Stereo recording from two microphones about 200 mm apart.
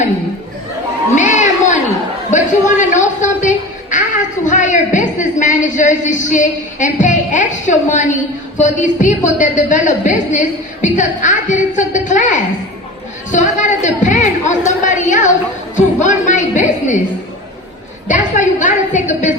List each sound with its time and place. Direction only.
1.1 s children playing: 35° left (ahead or behind)
2.3 s a sound: 35° left (ahead or behind)
4.4 s a man's voice: 40° left (ahead or behind)
18.1 s a woman's voice: 40° left (ahead or behind)